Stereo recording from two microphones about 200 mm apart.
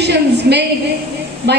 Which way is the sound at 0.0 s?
55° right (ahead or behind).